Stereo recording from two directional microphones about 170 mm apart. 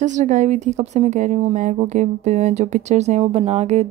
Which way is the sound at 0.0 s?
45° right (ahead or behind).